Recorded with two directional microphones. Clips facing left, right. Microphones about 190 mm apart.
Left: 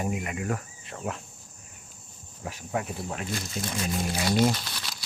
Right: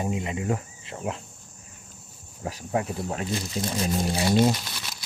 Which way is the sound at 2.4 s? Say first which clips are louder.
Right 4 dB; 30° right (ahead or behind).